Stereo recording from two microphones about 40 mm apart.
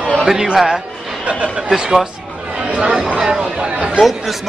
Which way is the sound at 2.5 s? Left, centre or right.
Right.